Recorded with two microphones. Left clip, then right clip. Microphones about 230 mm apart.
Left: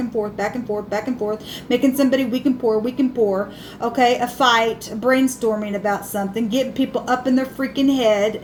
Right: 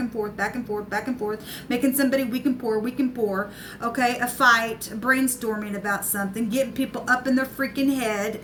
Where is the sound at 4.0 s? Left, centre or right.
Right.